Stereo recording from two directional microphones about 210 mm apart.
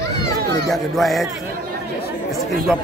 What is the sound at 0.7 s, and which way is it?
Speech, centre (ahead or behind).